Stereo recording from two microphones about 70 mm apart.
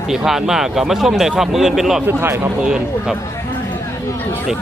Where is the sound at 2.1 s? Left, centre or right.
Right.